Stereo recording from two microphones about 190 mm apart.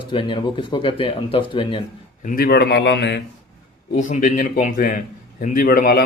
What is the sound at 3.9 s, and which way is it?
A man's voice, 40° left (ahead or behind).